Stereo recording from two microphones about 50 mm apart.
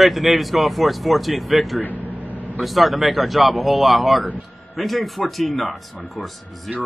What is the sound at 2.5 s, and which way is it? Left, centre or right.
Speech, centre.